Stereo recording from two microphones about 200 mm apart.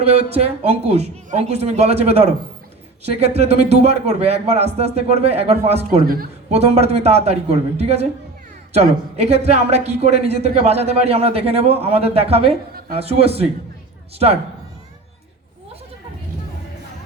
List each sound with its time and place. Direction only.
0.0 s a man's voice: 30° right (ahead or behind)